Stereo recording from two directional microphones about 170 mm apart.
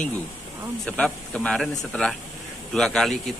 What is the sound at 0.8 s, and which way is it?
A man's voice, 5° left (ahead or behind).